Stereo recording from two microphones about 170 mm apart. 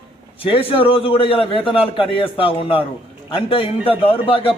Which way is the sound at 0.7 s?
30° left (ahead or behind).